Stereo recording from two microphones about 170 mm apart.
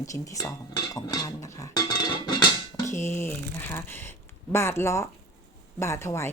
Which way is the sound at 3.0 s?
15° left (ahead or behind).